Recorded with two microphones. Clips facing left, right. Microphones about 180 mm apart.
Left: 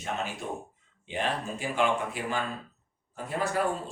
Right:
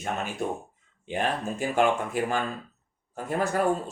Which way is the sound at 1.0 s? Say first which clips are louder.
Right 3 dB; 45° right (ahead or behind).